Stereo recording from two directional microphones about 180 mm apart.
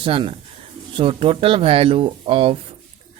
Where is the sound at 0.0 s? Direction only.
30° right (ahead or behind).